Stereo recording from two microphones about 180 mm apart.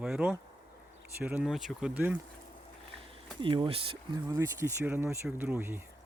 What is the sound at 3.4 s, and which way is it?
Speech, 25° right (ahead or behind).